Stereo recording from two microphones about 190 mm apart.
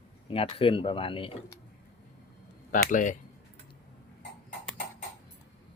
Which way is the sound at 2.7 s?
45° left (ahead or behind).